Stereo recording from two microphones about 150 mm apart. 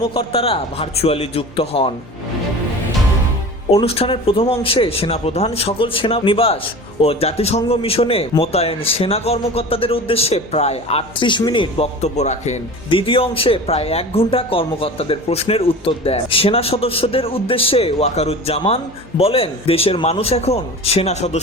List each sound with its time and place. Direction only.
0.1 s speech: 40° left (ahead or behind)
3.8 s speech: 40° left (ahead or behind)
11.9 s a man's voice: 50° left (ahead or behind)
12.9 s speech: 35° left (ahead or behind)